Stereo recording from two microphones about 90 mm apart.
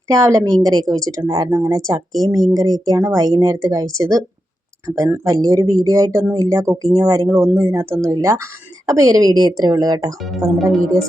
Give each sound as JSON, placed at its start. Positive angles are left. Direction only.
{"t": 0.1, "sound": "a woman's voice", "side_deg": -35}
{"t": 7.3, "sound": "a woman's voice", "side_deg": -30}
{"t": 10.2, "sound": "speech", "side_deg": 0}